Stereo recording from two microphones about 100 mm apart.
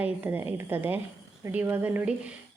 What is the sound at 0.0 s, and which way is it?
A woman's voice, 15° right (ahead or behind).